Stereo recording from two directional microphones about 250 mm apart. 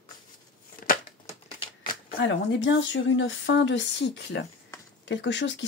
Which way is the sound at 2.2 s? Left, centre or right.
Left.